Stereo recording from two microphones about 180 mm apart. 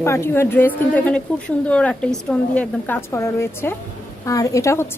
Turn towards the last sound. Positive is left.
turn(degrees=15)  # may be behind; listen again after turning